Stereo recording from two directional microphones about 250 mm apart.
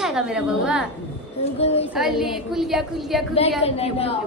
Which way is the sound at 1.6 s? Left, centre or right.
Left.